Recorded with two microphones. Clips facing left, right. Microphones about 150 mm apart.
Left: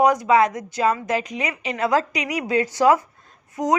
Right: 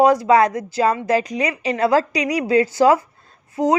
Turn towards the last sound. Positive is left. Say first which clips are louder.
# right 3 dB
turn(degrees=-30)  # may be behind; listen again after turning